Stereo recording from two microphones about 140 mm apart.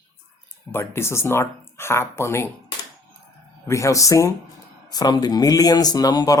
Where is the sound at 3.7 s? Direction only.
20° left (ahead or behind).